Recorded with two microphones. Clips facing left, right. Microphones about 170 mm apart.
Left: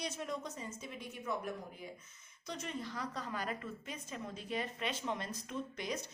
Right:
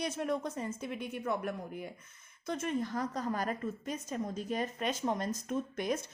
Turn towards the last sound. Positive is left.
turn(degrees=-50)  # may be behind; listen again after turning